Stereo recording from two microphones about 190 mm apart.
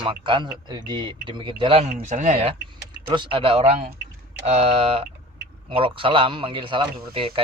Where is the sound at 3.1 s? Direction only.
30° right (ahead or behind).